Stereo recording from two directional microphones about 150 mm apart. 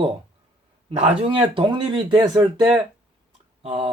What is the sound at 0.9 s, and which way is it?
Speech, 40° right (ahead or behind).